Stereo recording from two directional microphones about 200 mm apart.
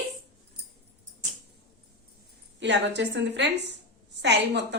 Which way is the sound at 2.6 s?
60° right (ahead or behind).